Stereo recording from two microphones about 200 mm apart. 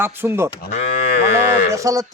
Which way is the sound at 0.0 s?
10° right (ahead or behind).